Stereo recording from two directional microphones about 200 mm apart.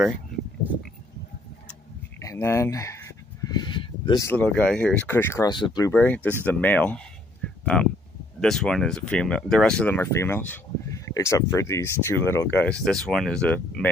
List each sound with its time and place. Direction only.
1.7 s speech: 10° left (ahead or behind)